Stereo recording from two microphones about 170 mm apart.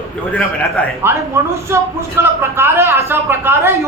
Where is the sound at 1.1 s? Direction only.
15° right (ahead or behind).